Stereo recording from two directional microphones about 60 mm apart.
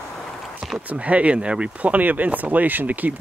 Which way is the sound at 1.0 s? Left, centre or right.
Right.